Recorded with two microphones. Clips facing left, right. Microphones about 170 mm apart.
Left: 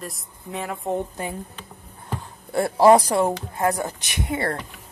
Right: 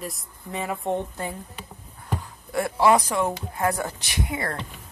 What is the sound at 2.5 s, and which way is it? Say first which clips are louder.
Speech: left 5 dB; 35° left (ahead or behind).